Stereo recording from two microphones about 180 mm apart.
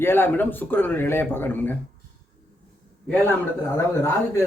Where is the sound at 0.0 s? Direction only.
10° left (ahead or behind).